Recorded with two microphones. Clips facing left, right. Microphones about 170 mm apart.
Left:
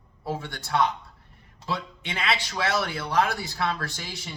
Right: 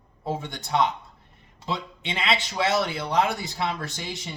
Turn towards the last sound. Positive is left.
turn(degrees=-20)  # may be behind; listen again after turning